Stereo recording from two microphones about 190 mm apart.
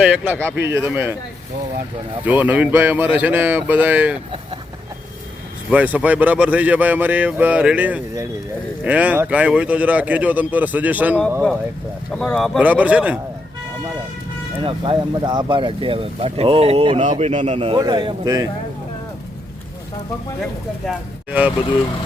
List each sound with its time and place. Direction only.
0.0 s speech: 5° right (ahead or behind)
2.2 s speech: 10° right (ahead or behind)
5.7 s speech: 5° right (ahead or behind)
12.1 s speech: 5° left (ahead or behind)
12.5 s speech: 5° right (ahead or behind)
14.6 s a man's voice: 25° right (ahead or behind)
20.8 s speech: 5° right (ahead or behind)